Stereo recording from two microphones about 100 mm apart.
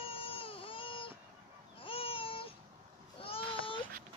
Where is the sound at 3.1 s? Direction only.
65° left (ahead or behind).